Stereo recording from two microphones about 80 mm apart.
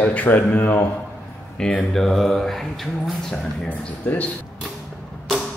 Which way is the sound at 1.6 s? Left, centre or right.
Centre.